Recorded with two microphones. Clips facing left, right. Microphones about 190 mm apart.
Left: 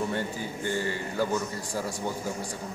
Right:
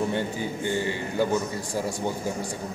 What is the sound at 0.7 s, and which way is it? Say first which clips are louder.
Speech: right 1 dB; 20° right (ahead or behind).